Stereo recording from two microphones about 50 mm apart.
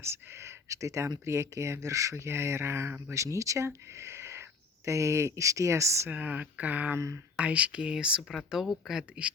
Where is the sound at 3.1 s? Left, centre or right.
Right.